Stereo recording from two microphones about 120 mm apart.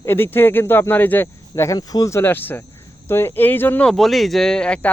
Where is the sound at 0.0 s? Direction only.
20° left (ahead or behind).